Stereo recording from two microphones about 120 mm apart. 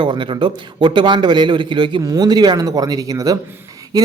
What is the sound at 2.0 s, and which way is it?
Speech, 30° right (ahead or behind).